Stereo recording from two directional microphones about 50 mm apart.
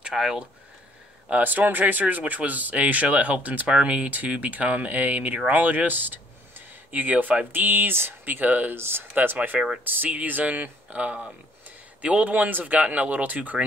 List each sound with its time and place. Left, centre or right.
0.1 s speech: centre
1.4 s speech: right
8.7 s speech: right
9.2 s speech: right